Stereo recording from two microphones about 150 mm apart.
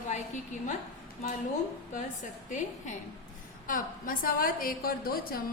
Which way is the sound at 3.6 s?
65° left (ahead or behind).